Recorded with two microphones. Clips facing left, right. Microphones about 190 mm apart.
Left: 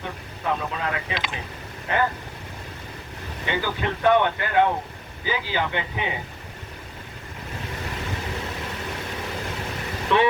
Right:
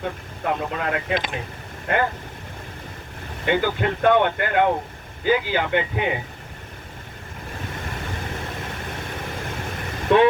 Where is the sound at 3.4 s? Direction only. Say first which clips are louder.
Right 5 dB; 55° right (ahead or behind).